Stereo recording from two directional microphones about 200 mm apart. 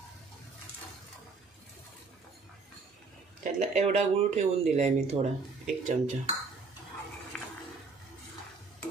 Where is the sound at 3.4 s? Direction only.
35° right (ahead or behind).